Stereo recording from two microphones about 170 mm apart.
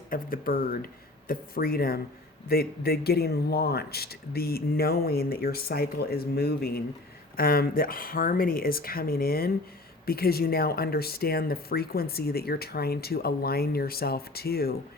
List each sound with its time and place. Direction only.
0.1 s speech: 55° left (ahead or behind)